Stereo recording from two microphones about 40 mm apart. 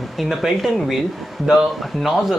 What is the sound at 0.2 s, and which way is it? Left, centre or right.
Speech, centre.